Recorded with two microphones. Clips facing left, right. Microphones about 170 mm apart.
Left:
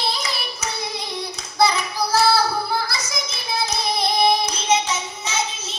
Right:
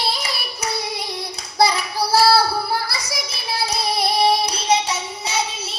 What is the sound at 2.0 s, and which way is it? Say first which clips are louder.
Child singing: right 2 dB; 35° right (ahead or behind).